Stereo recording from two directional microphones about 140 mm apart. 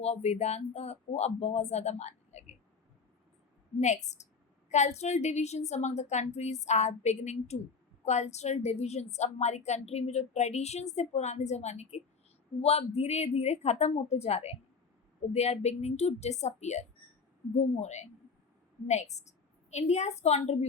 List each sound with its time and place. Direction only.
0.0 s a woman's voice: 50° left (ahead or behind)
3.8 s a woman's voice: 55° left (ahead or behind)